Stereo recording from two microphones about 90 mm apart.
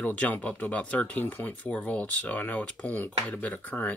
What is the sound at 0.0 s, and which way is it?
Speech, 15° left (ahead or behind).